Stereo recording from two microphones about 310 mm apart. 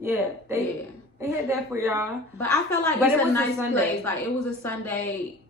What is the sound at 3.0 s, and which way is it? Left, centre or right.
Speech, centre.